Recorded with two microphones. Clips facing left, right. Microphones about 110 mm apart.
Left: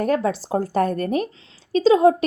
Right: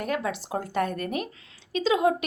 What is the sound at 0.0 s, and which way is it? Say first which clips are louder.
Speech: left 8 dB; 35° left (ahead or behind).